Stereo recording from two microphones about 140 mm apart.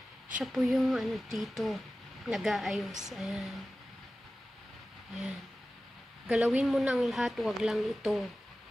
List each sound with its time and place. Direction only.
0.4 s a woman's voice: centre (ahead or behind)
6.2 s a woman's voice: 5° right (ahead or behind)